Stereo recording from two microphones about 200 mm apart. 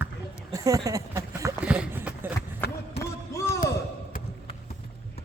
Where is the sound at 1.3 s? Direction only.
10° right (ahead or behind).